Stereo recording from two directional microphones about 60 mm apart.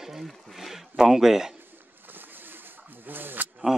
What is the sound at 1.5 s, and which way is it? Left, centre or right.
Bird, right.